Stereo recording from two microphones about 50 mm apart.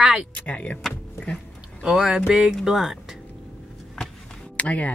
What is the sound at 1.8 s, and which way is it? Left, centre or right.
Speech, centre.